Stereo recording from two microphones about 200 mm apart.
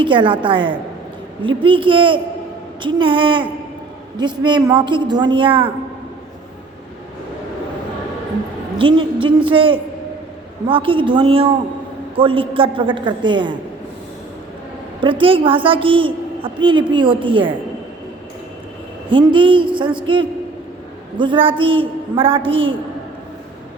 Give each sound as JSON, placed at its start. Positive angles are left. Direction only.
{"t": 0.0, "sound": "a woman's voice", "side_deg": -25}
{"t": 8.8, "sound": "a woman's voice", "side_deg": -25}
{"t": 15.0, "sound": "a woman's voice", "side_deg": -25}
{"t": 19.1, "sound": "a woman's voice", "side_deg": -25}
{"t": 21.2, "sound": "a woman's voice", "side_deg": -25}